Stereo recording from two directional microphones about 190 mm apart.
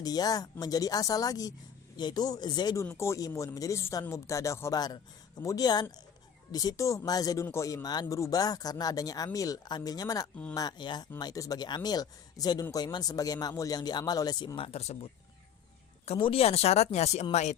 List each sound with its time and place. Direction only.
0.0 s speech: 20° left (ahead or behind)
16.0 s speech: 30° left (ahead or behind)